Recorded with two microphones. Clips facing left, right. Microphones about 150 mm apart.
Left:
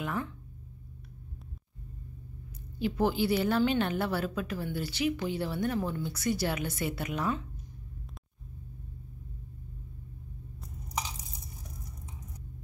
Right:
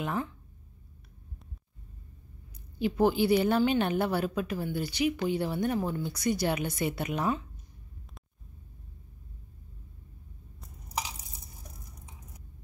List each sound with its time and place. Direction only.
0.0 s speech: 25° right (ahead or behind)
2.8 s a woman's voice: 15° right (ahead or behind)